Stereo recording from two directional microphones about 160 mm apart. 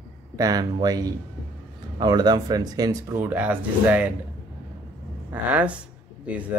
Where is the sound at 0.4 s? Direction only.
25° right (ahead or behind).